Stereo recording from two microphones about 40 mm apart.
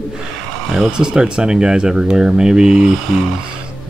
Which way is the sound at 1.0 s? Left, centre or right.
Right.